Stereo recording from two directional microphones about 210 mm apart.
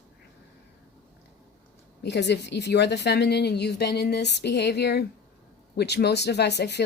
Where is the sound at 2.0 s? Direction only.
55° left (ahead or behind).